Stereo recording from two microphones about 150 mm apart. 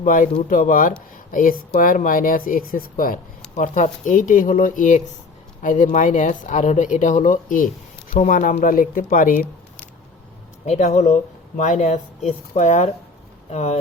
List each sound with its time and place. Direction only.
0.0 s speech: 65° left (ahead or behind)
3.5 s speech: 55° left (ahead or behind)
10.7 s speech: 50° left (ahead or behind)